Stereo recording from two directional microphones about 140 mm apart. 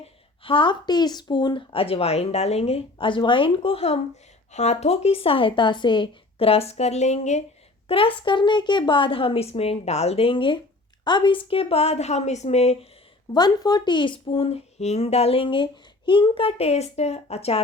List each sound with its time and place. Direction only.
0.0 s speech: 40° left (ahead or behind)
7.9 s speech: 40° left (ahead or behind)
13.3 s speech: 30° left (ahead or behind); by 17.6 s 45° left (ahead or behind)